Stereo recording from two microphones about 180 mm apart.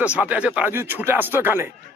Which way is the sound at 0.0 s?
5° right (ahead or behind).